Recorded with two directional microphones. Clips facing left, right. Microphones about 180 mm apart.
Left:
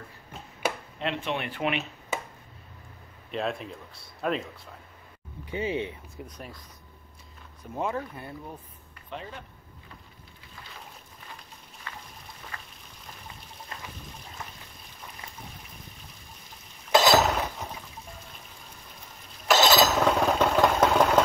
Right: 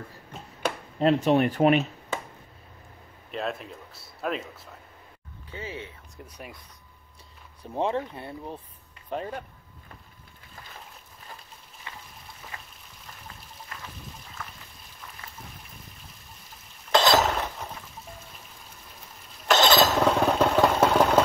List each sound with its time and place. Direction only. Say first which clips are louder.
0.9 s speech: right 10 dB; 40° right (ahead or behind)
3.3 s speech: left 1 dB; centre (ahead or behind)
5.5 s speech: left 8 dB; 20° left (ahead or behind)
6.2 s speech: right 1 dB; 10° right (ahead or behind)
7.7 s speech: right 4 dB; 30° right (ahead or behind)
9.1 s speech: right 7 dB; 45° right (ahead or behind)
11.9 s a sound: left 1 dB; 20° right (ahead or behind)
12.5 s raindrop: right 1 dB; 20° right (ahead or behind)
13.7 s trickle: left 1 dB; 25° left (ahead or behind)
16.9 s dishes: left 1 dB; 5° left (ahead or behind)
19.4 s vehicle: right 1 dB; 5° left (ahead or behind)